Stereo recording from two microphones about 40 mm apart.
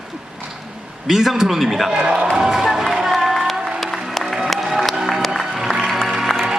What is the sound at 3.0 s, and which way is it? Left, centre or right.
Crowd, centre.